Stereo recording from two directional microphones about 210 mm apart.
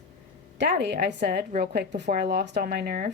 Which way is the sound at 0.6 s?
55° right (ahead or behind).